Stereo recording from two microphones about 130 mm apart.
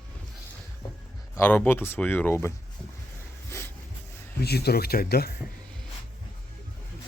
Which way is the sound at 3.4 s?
20° left (ahead or behind).